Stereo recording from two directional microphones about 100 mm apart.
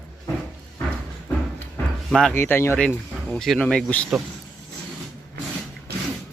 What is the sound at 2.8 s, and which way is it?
Speech, 5° left (ahead or behind).